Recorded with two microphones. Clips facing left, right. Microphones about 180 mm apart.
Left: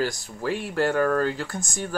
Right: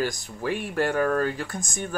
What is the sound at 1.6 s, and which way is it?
Speech, 20° right (ahead or behind).